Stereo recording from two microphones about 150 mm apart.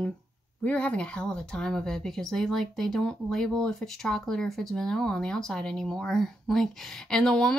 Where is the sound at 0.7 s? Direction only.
10° left (ahead or behind).